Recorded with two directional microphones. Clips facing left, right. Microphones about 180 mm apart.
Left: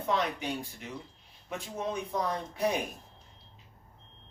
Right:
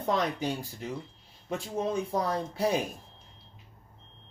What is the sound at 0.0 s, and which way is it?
Speech, 35° right (ahead or behind).